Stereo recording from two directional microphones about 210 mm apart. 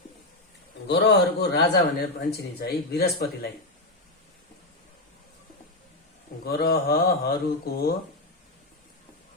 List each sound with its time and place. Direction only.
0.9 s a man's voice: 55° left (ahead or behind)
6.4 s a man's voice: 50° left (ahead or behind)